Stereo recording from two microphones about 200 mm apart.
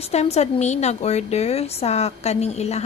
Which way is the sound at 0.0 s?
30° left (ahead or behind).